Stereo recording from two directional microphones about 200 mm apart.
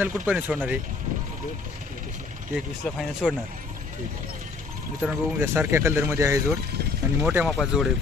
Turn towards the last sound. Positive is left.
turn(degrees=-5)  # may be behind; listen again after turning